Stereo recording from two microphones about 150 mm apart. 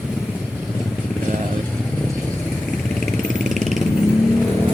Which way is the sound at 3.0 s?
Centre (ahead or behind).